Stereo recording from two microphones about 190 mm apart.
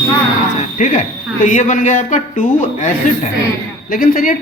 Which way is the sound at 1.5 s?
40° left (ahead or behind).